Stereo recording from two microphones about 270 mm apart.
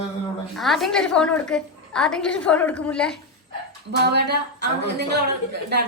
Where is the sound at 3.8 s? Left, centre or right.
Right.